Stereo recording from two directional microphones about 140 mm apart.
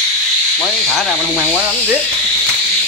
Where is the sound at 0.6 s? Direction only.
5° left (ahead or behind).